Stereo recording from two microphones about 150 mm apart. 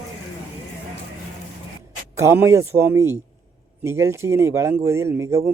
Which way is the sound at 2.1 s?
20° right (ahead or behind).